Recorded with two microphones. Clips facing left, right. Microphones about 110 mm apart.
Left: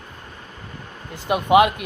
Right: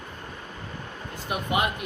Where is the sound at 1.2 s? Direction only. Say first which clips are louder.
Left 11 dB; 90° left.